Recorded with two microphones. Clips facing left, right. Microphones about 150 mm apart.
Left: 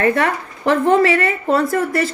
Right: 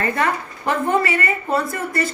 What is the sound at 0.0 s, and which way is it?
Speech, 70° left (ahead or behind).